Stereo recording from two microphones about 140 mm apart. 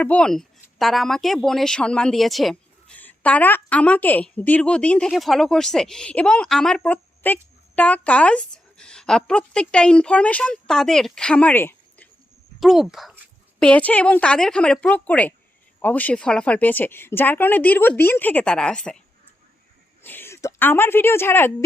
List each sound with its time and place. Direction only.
0.0 s a woman's voice: 10° left (ahead or behind)
12.5 s speech: centre (ahead or behind)
13.6 s a woman's voice: 10° left (ahead or behind)
20.0 s a woman's voice: 15° left (ahead or behind)